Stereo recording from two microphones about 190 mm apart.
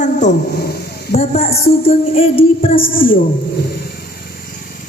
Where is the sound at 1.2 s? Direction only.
35° left (ahead or behind).